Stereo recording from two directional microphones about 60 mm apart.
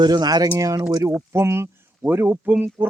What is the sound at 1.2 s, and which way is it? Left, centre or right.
Speech, right.